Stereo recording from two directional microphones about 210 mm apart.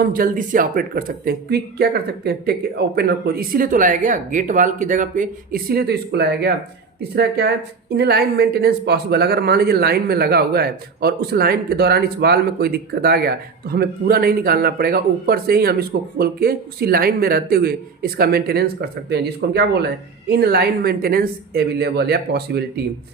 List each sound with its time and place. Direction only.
0.0 s a woman's voice: 40° right (ahead or behind)